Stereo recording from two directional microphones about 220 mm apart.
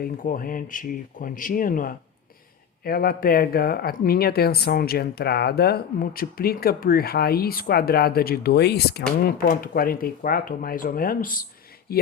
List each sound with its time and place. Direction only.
0.0 s speech: 40° left (ahead or behind)